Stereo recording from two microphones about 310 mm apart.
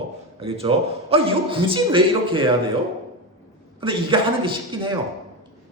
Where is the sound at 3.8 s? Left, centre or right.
Centre.